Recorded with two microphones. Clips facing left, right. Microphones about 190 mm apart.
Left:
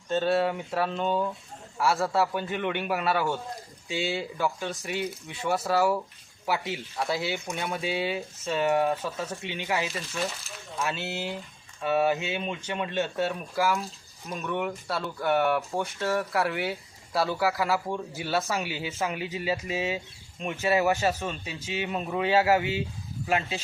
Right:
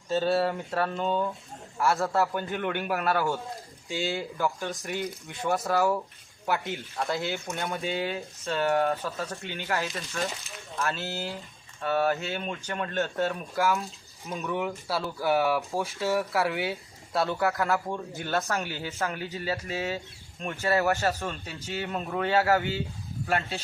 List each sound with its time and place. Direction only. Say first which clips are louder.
0.1 s speech: even; centre (ahead or behind)
18.6 s speech: left 1 dB; 15° left (ahead or behind)
22.4 s speech: left 1 dB; 15° left (ahead or behind)